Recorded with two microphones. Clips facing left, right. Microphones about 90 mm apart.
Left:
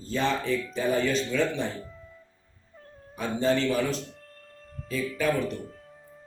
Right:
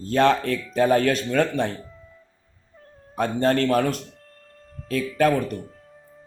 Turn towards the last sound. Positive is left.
turn(degrees=-60)  # may be behind; listen again after turning